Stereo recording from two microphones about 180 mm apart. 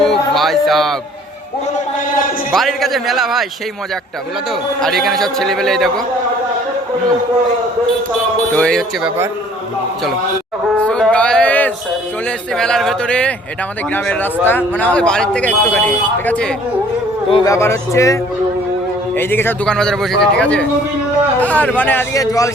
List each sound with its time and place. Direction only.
0.0 s music: centre (ahead or behind)
2.5 s a man's voice: centre (ahead or behind)
4.8 s a man's voice: centre (ahead or behind)
8.5 s a man's voice: 5° left (ahead or behind)
10.8 s music: 5° left (ahead or behind)
12.5 s a man's voice: 5° left (ahead or behind); by 22.4 s 20° left (ahead or behind)